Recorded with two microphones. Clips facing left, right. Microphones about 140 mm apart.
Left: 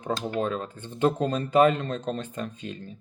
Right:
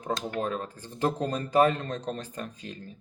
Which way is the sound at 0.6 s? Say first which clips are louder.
Left 4 dB; 35° right (ahead or behind).